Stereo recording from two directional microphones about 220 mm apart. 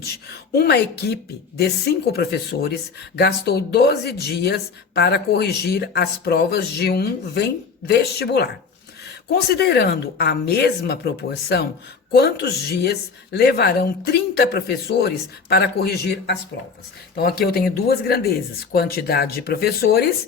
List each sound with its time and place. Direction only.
0.5 s a woman's voice: 45° left (ahead or behind)